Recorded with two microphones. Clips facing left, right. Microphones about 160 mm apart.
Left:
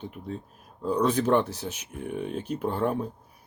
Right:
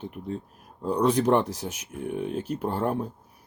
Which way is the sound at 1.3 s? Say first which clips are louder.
Right 1 dB; 10° right (ahead or behind).